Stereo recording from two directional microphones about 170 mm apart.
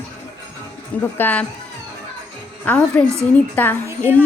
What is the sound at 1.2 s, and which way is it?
Speech, 10° left (ahead or behind).